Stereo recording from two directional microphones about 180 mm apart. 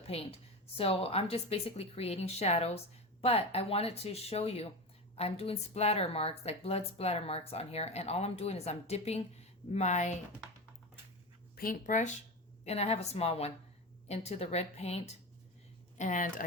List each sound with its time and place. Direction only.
0.1 s a woman's voice: 35° left (ahead or behind)
11.5 s a woman's voice: 50° left (ahead or behind)